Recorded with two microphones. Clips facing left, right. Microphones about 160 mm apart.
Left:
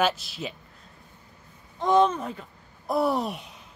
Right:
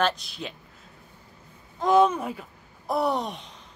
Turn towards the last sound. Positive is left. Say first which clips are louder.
# left 1 dB
turn(degrees=10)  # may be behind; listen again after turning